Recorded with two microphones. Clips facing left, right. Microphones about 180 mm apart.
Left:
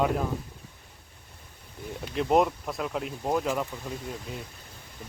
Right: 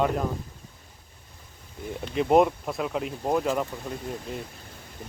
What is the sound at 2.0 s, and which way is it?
Speech, centre (ahead or behind).